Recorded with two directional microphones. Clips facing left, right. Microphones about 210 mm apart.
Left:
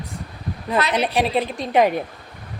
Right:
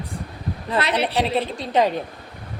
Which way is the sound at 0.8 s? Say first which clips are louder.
Left 1 dB; 30° right (ahead or behind).